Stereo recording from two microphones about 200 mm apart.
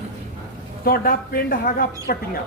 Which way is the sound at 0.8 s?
50° left (ahead or behind).